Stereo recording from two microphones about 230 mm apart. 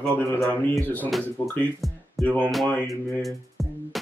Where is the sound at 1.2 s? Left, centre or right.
Centre.